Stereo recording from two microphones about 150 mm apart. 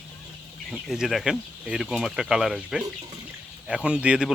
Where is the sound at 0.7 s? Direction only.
Centre (ahead or behind).